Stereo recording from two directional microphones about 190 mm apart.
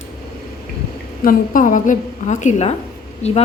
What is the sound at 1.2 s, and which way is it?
A woman's voice, 45° left (ahead or behind).